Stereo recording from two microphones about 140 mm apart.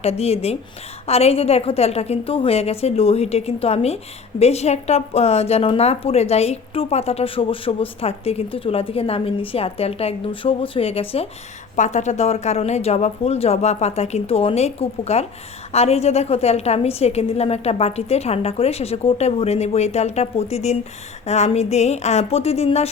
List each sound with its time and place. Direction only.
0.0 s a woman's voice: 50° left (ahead or behind)
11.8 s a woman's voice: 55° left (ahead or behind)